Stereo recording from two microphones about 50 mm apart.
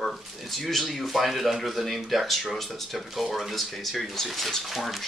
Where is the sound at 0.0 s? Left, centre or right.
Centre.